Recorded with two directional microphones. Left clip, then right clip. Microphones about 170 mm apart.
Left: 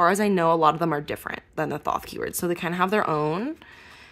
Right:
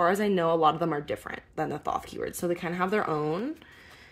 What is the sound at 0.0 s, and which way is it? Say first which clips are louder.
Speech: left 4 dB; 40° left (ahead or behind).